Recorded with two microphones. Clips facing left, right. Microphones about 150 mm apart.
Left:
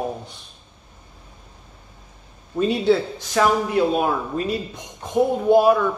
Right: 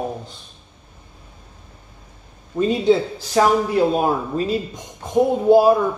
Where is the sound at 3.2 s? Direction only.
35° right (ahead or behind).